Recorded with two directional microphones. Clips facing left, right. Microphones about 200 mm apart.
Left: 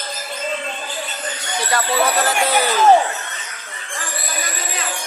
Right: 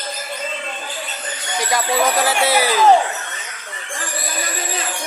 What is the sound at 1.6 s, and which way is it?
Speech, 15° right (ahead or behind).